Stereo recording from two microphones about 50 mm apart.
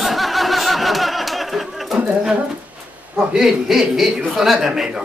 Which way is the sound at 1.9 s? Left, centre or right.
Centre.